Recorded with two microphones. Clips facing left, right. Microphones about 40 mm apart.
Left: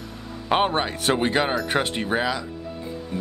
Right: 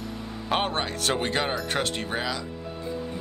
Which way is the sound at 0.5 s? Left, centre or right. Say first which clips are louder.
Left 5 dB; centre.